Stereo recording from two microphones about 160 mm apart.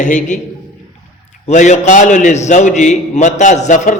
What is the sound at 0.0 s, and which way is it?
Speech, 50° left (ahead or behind).